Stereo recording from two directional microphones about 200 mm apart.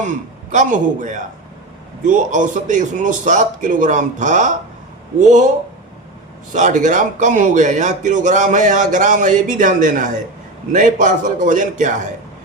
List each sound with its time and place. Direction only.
0.0 s a man's voice: 40° right (ahead or behind)
6.5 s a man's voice: 40° right (ahead or behind)